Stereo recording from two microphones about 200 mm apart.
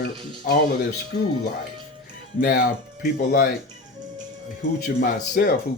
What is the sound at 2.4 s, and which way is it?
A man's voice, 45° left (ahead or behind).